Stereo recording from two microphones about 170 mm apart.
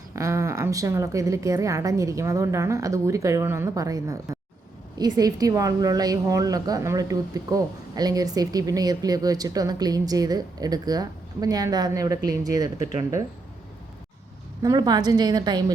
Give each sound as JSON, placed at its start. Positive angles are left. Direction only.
{"t": 0.2, "sound": "a woman's voice", "side_deg": -15}
{"t": 14.6, "sound": "a woman's voice", "side_deg": -20}